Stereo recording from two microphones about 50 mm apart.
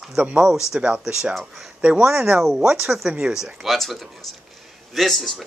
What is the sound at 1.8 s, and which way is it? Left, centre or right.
A man's voice, right.